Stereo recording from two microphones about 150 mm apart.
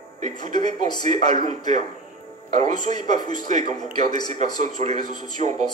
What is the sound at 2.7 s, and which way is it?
A man's voice, 55° right (ahead or behind).